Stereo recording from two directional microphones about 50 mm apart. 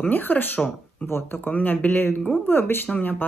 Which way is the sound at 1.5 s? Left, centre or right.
Left.